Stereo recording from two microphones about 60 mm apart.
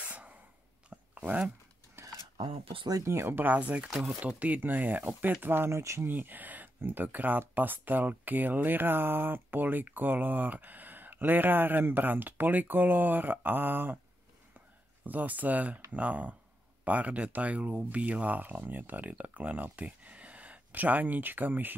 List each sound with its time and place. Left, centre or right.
0.0 s a sound: right
3.1 s speech: right
3.3 s speech: right
5.7 s speech: right
6.0 s speech: right
15.0 s speech: right